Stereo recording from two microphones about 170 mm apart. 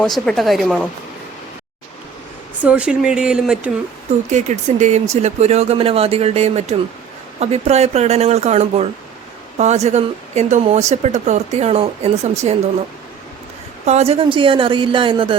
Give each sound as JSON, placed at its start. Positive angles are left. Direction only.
{"t": 0.0, "sound": "speech", "side_deg": 0}
{"t": 2.6, "sound": "speech", "side_deg": -5}
{"t": 4.3, "sound": "speech", "side_deg": -45}
{"t": 13.8, "sound": "a woman's voice", "side_deg": -40}